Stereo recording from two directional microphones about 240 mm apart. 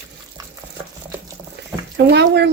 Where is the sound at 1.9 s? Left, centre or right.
Right.